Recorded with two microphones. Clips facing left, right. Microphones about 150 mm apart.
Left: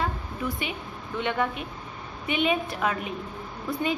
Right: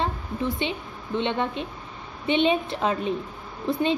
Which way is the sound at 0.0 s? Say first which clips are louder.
Right 3 dB; 25° right (ahead or behind).